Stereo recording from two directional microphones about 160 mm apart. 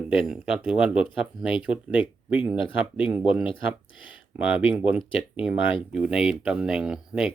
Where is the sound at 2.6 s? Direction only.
35° left (ahead or behind).